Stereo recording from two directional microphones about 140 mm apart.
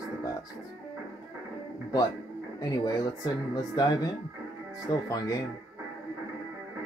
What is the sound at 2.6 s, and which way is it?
Speech, 25° left (ahead or behind).